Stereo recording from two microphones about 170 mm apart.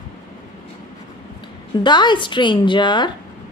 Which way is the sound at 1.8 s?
25° left (ahead or behind).